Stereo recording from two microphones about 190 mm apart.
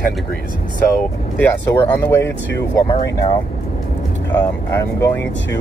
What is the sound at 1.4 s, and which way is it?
Speech, 10° left (ahead or behind).